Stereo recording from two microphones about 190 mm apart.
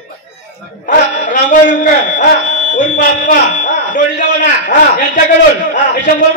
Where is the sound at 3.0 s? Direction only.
45° left (ahead or behind).